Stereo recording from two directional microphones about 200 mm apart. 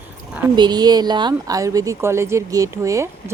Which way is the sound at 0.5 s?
20° right (ahead or behind).